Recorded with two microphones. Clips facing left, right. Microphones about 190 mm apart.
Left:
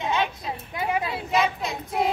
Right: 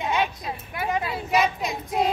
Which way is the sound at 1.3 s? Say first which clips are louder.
Right 2 dB; 15° right (ahead or behind).